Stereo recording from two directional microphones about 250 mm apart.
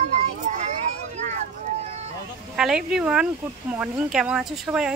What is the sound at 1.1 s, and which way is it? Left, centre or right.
Vehicle, right.